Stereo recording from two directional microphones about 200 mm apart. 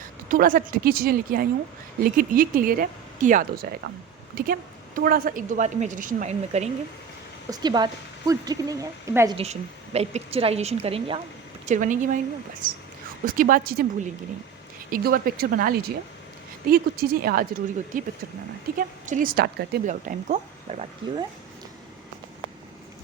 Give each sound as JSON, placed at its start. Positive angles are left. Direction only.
{"t": 0.0, "sound": "a woman's voice", "side_deg": -45}
{"t": 7.5, "sound": "speech", "side_deg": -20}
{"t": 9.4, "sound": "a woman's voice", "side_deg": -30}
{"t": 14.8, "sound": "speech", "side_deg": -45}
{"t": 19.9, "sound": "a woman's voice", "side_deg": -40}